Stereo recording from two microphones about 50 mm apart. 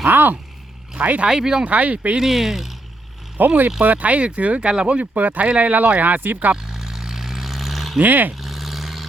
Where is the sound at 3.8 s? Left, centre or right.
Right.